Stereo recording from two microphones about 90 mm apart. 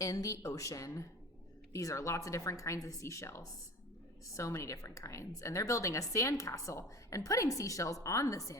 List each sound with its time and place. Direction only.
0.0 s a woman's voice: 40° left (ahead or behind)